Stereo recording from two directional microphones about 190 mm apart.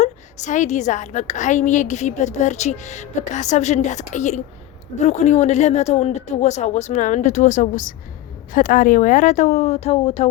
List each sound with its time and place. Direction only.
0.0 s a woman's voice: 40° left (ahead or behind)